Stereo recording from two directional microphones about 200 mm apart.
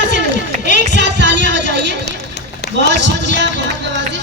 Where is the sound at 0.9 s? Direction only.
60° right (ahead or behind).